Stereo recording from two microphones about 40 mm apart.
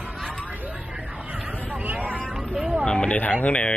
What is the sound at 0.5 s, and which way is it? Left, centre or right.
Vehicle, right.